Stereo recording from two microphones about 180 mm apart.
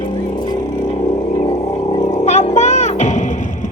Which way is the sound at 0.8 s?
40° left (ahead or behind).